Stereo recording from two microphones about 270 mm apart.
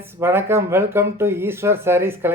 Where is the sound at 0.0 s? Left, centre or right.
Centre.